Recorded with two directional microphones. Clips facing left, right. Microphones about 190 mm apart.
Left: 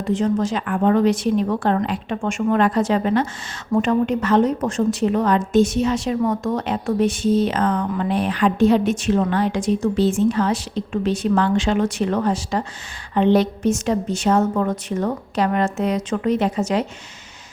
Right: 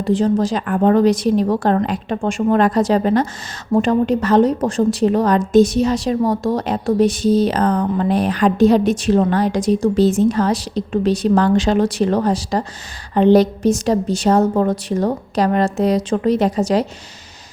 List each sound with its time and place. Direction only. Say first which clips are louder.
0.0 s a woman's voice: right 4 dB; 35° right (ahead or behind)